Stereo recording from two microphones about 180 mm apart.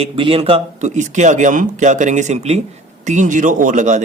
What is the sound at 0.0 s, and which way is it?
A man's voice, 30° right (ahead or behind).